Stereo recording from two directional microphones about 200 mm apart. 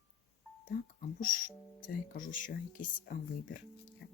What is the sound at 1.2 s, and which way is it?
Speech, 40° left (ahead or behind).